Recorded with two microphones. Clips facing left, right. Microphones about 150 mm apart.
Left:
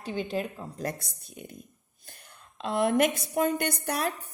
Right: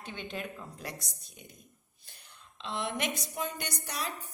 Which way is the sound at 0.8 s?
55° left (ahead or behind).